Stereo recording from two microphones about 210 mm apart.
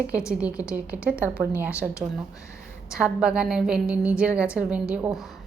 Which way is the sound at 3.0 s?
5° right (ahead or behind).